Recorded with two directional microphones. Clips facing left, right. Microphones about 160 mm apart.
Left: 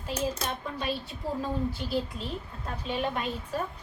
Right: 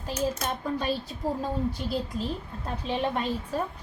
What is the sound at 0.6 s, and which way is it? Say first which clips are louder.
Speech: right 4 dB; 40° right (ahead or behind).